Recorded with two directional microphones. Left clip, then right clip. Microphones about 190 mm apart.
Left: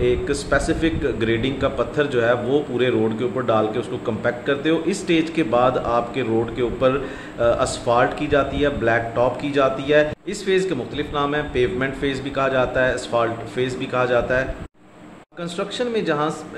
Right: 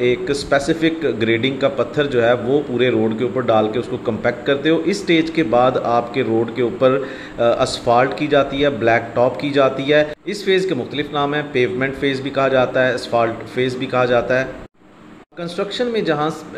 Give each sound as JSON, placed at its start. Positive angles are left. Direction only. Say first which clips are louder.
{"t": 0.2, "sound": "a man's voice", "louder": "right 3 dB", "side_deg": -15}
{"t": 15.5, "sound": "a man's voice", "louder": "right 3 dB", "side_deg": -15}